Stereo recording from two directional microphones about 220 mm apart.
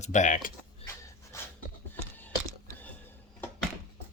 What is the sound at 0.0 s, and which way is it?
Speech, 35° left (ahead or behind).